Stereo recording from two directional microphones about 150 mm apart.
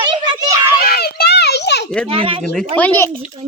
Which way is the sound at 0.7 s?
90° left.